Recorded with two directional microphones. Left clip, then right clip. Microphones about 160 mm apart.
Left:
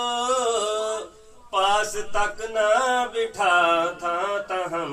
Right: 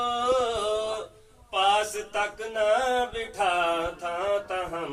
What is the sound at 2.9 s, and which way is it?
Mantra, 35° left (ahead or behind).